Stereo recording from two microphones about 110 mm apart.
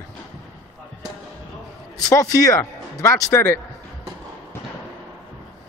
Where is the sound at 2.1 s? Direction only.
30° left (ahead or behind).